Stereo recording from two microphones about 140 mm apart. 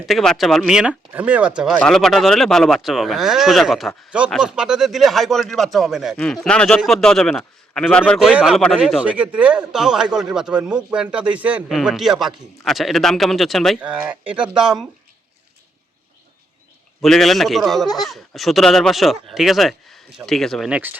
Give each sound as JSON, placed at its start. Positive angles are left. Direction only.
{"t": 0.0, "sound": "speech", "side_deg": 0}
{"t": 1.8, "sound": "speech", "side_deg": 5}
{"t": 8.3, "sound": "speech", "side_deg": -5}
{"t": 17.0, "sound": "speech", "side_deg": 0}
{"t": 17.8, "sound": "speech", "side_deg": 30}
{"t": 18.1, "sound": "speech", "side_deg": 0}